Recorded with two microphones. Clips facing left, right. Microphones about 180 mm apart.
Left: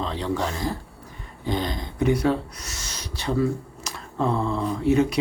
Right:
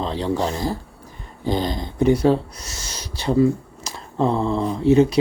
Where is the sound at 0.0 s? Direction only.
30° right (ahead or behind).